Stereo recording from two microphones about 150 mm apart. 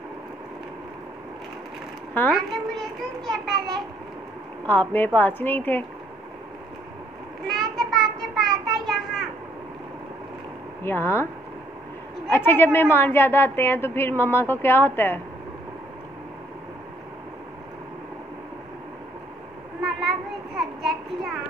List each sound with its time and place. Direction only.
2.3 s a child's voice: centre (ahead or behind)
4.6 s a woman's voice: 15° left (ahead or behind)
7.4 s a sound: centre (ahead or behind)
10.8 s a woman's voice: 15° left (ahead or behind)
12.3 s a woman's voice: 15° left (ahead or behind)
19.8 s child singing: centre (ahead or behind)